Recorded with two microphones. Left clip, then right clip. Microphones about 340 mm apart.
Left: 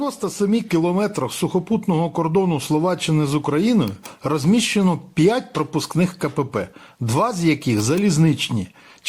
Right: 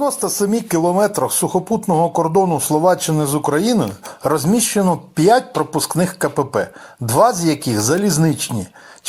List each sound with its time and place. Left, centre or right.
0.0 s speech: right